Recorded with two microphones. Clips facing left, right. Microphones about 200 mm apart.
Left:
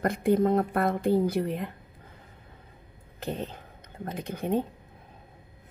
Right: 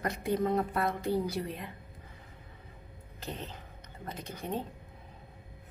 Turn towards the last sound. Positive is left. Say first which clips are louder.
# left 7 dB
turn(degrees=60)  # may be behind; listen again after turning